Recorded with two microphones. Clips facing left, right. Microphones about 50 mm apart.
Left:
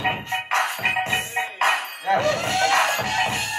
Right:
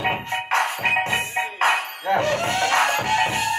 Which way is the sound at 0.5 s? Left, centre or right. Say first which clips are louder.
Right 2 dB; right.